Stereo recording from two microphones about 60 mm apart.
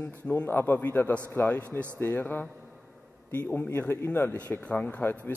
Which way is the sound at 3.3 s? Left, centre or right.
Left.